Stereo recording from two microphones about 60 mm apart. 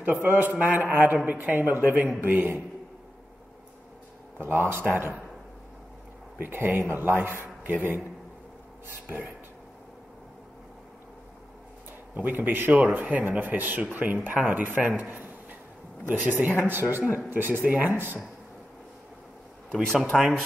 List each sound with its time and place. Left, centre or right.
0.0 s a man's voice: right
4.4 s a man's voice: right
6.4 s a man's voice: right
12.2 s a man's voice: right
19.7 s speech: centre